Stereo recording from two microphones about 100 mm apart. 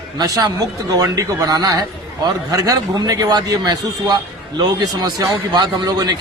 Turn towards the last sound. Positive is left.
turn(degrees=-40)  # may be behind; listen again after turning